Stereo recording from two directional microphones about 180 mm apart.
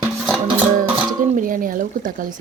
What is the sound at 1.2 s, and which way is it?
Speech, 50° right (ahead or behind).